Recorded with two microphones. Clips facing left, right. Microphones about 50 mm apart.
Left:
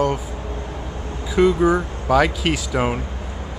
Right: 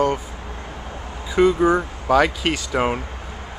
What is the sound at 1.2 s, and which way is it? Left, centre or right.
Speech, centre.